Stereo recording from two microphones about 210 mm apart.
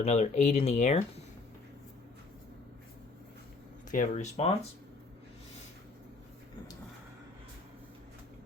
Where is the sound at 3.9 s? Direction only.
35° left (ahead or behind).